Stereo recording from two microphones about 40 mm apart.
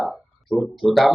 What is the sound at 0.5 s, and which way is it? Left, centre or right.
Speech, left.